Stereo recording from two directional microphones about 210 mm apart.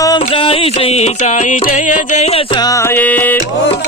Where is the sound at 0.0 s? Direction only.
20° left (ahead or behind).